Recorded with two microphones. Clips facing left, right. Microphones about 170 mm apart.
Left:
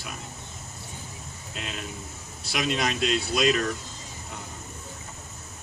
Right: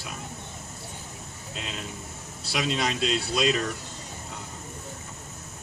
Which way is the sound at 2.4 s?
30° right (ahead or behind).